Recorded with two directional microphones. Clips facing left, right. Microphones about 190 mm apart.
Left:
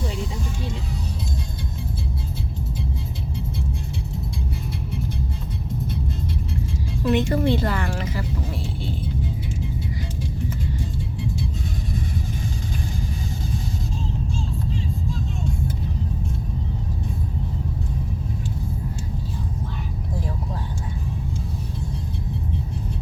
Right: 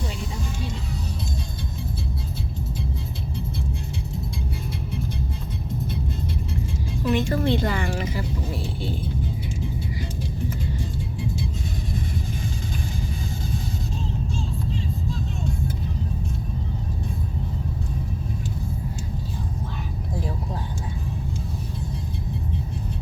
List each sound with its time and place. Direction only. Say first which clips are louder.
7.1 s a woman's voice: left 2 dB; 20° left (ahead or behind)
7.5 s speech: even; centre (ahead or behind)